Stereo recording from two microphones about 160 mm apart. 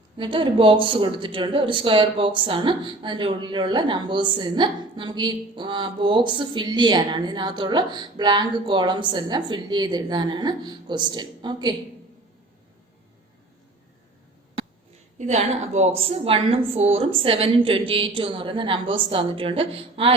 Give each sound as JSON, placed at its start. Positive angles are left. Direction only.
{"t": 0.2, "sound": "speech", "side_deg": -30}
{"t": 15.2, "sound": "a woman's voice", "side_deg": -45}